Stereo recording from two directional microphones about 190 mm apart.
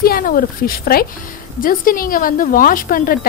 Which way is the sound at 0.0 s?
50° left (ahead or behind).